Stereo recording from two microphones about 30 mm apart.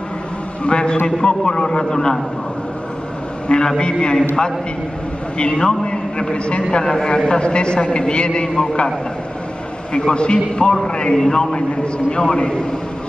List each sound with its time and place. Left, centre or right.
0.7 s a man's voice: left
3.4 s a man's voice: left
9.9 s a man's voice: left
11.5 s a man's voice: left